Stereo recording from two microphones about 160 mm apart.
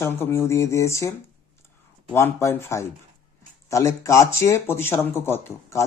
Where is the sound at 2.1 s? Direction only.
15° left (ahead or behind).